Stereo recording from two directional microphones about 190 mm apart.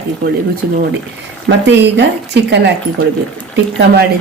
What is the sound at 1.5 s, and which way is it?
Speech, 65° right (ahead or behind).